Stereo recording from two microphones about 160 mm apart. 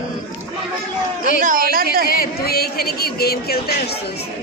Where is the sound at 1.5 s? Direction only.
65° right (ahead or behind).